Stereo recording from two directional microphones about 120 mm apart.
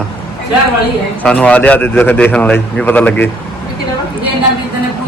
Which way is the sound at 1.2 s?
10° left (ahead or behind).